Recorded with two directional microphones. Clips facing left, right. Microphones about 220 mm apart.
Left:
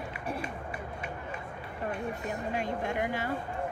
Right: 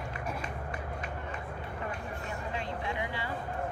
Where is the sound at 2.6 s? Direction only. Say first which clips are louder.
Left 5 dB; 45° left (ahead or behind).